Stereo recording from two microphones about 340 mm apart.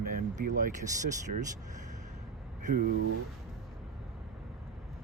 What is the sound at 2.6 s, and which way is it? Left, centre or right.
Speech, right.